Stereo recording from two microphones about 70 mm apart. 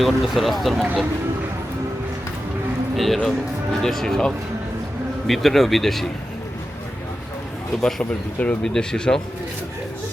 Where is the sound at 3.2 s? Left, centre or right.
Centre.